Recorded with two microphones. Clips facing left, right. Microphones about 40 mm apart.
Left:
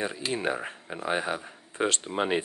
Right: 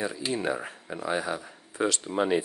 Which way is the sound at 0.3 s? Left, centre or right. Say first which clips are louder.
Even; left.